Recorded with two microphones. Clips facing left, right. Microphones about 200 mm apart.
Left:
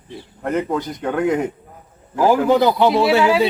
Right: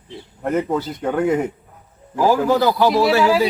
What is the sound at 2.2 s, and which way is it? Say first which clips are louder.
Speech: left 2 dB; 20° left (ahead or behind).